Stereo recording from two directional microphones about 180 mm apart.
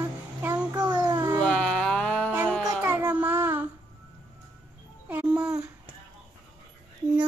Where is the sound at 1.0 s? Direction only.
20° right (ahead or behind).